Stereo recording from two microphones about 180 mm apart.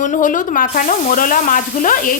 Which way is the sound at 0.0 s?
45° left (ahead or behind).